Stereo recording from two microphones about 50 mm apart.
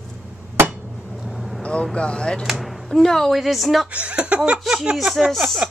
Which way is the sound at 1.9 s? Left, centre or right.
Centre.